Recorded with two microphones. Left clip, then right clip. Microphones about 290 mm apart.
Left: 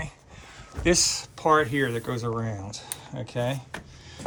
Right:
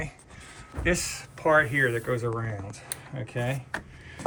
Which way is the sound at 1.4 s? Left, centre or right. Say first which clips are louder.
Even; left.